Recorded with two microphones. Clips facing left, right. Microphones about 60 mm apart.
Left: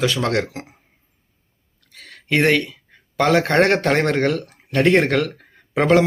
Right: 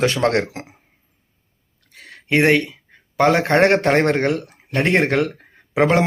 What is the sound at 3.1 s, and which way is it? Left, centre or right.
Speech, centre.